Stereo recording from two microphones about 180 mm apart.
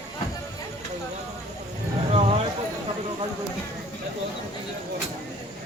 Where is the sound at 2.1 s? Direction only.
35° right (ahead or behind).